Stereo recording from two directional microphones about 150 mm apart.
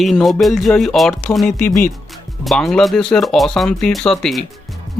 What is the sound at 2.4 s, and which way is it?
Speech, centre (ahead or behind).